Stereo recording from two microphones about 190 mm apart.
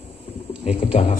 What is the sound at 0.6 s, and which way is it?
Speech, 35° left (ahead or behind).